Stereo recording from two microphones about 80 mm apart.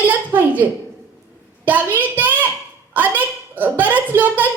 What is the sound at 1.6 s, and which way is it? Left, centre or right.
A child's voice, right.